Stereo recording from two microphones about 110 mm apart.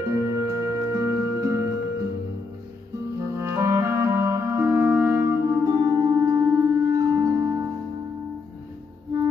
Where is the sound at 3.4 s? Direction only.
30° right (ahead or behind).